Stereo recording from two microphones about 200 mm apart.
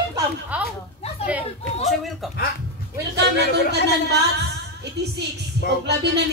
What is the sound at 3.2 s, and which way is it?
Speech, 55° right (ahead or behind).